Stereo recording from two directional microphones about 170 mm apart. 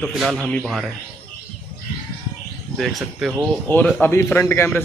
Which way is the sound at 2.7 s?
Centre (ahead or behind).